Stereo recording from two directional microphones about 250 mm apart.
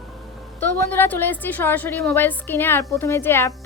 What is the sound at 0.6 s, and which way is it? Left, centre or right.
Speech, centre.